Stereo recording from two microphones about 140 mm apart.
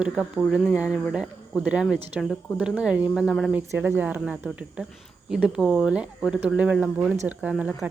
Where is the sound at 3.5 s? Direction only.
10° right (ahead or behind).